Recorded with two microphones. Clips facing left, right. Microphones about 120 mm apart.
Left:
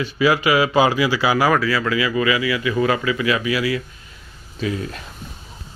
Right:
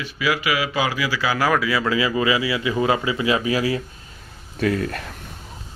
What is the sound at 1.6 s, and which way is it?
Speech, 15° right (ahead or behind).